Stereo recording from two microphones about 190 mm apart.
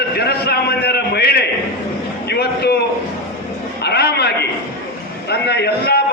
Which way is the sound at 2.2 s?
60° left (ahead or behind).